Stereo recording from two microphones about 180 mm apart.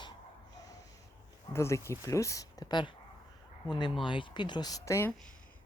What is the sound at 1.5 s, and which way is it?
Speech, 15° left (ahead or behind).